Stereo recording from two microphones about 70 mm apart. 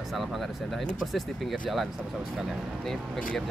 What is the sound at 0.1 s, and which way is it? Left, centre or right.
Speech, centre.